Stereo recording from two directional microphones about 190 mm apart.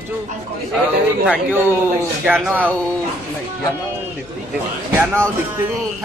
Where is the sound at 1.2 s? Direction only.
10° right (ahead or behind).